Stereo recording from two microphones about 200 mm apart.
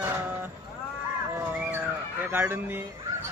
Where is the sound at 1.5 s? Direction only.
5° right (ahead or behind).